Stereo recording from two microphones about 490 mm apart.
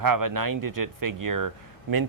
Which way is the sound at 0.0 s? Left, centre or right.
Right.